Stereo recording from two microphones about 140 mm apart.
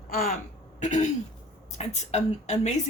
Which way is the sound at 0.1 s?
90° left.